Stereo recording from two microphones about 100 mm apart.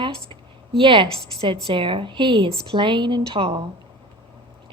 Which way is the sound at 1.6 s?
60° right (ahead or behind).